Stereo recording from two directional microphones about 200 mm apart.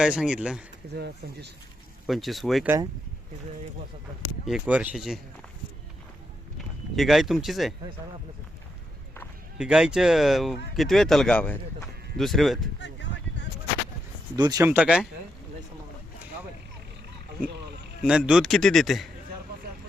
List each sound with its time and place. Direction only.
0.0 s speech: 5° right (ahead or behind)
0.9 s speech: 55° right (ahead or behind)
2.0 s speech: centre (ahead or behind)
4.4 s speech: 5° right (ahead or behind)
6.6 s speech: centre (ahead or behind)
9.6 s speech: 5° right (ahead or behind)
12.8 s a sound: 65° left (ahead or behind)
14.3 s speech: 20° right (ahead or behind)
18.0 s speech: 5° right (ahead or behind)